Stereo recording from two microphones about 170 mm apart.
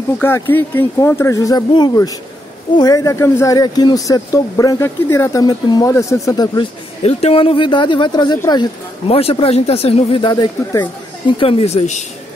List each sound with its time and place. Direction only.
0.2 s speech: 10° left (ahead or behind)
7.0 s speech: 35° left (ahead or behind)